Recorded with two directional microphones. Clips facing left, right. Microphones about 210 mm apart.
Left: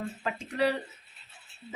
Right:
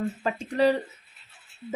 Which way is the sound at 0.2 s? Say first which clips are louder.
Right 5 dB; 35° right (ahead or behind).